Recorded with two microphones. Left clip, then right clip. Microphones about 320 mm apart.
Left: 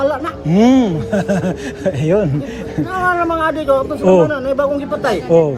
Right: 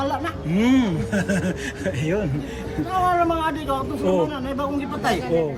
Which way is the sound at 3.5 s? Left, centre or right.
Centre.